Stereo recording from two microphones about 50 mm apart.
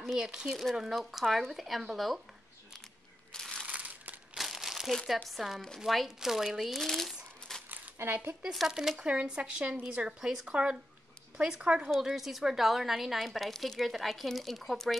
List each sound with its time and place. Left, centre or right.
0.0 s a woman's voice: centre
3.6 s crushing: right
4.4 s crumpling: centre
4.9 s a woman's voice: centre
8.0 s speech: right
8.4 s speech: centre
9.0 s speech: right
12.0 s a woman's voice: centre